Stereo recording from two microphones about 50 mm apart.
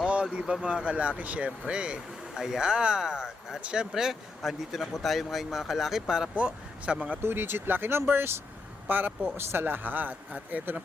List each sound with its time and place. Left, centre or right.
0.0 s vehicle: right
0.6 s speech: right
1.5 s speech: centre
3.9 s speech: centre
6.3 s speech: right
7.2 s speech: right
9.4 s speech: right